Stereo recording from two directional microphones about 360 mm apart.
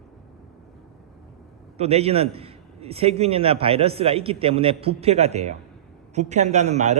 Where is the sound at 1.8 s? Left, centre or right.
Centre.